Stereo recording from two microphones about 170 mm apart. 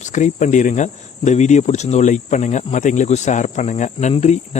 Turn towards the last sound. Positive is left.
turn(degrees=40)  # may be behind; listen again after turning